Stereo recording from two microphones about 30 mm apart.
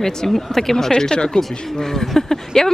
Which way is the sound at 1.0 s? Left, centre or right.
Centre.